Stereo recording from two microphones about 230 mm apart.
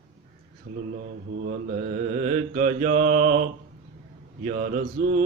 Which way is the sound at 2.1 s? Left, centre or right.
Right.